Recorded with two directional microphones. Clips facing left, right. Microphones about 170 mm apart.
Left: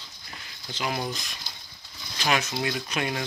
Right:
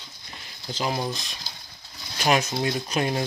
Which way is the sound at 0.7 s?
30° right (ahead or behind).